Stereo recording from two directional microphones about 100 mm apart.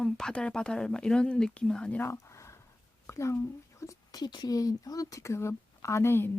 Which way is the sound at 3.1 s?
30° left (ahead or behind).